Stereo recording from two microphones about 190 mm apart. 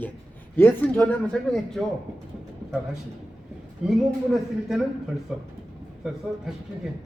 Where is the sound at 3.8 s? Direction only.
Centre (ahead or behind).